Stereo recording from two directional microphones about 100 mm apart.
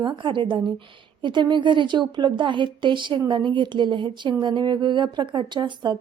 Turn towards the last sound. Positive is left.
turn(degrees=-50)  # may be behind; listen again after turning